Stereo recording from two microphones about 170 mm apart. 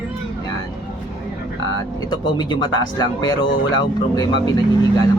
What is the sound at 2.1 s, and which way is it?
Speech, 25° left (ahead or behind).